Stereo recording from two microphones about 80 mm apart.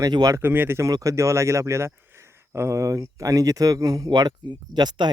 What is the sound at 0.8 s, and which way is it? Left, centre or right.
Speech, right.